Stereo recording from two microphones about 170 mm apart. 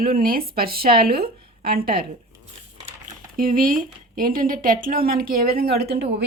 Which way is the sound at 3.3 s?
55° right (ahead or behind).